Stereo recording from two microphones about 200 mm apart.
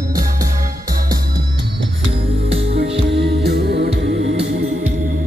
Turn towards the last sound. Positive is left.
turn(degrees=-55)  # may be behind; listen again after turning